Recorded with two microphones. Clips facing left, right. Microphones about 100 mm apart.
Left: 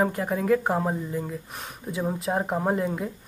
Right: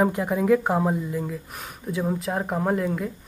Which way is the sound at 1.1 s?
5° left (ahead or behind).